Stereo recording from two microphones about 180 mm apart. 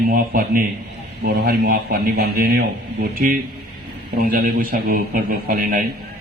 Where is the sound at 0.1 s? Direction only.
50° right (ahead or behind).